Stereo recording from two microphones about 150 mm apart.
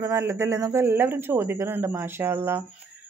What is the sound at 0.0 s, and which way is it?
Speech, 20° right (ahead or behind).